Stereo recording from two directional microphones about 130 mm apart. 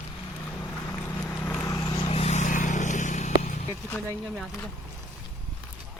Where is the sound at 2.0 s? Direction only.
55° left (ahead or behind).